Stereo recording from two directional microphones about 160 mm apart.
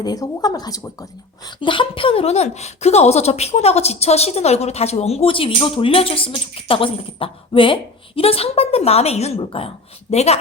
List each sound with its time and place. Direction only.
0.0 s speech: 25° left (ahead or behind); by 10.3 s 40° left (ahead or behind)